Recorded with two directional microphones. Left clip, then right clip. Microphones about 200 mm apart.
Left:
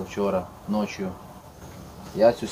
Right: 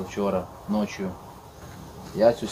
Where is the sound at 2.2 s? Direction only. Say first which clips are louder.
Left 1 dB; 20° left (ahead or behind).